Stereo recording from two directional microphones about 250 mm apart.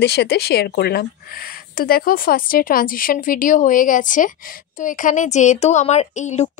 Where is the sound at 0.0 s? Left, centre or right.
Left.